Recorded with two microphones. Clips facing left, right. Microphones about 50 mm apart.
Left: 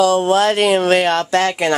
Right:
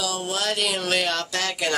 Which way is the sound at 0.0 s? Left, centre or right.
Left.